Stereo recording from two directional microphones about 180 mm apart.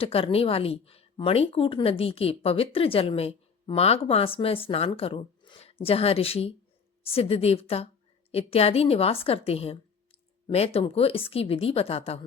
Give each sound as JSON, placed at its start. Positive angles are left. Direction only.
{"t": 0.0, "sound": "a woman's voice", "side_deg": 30}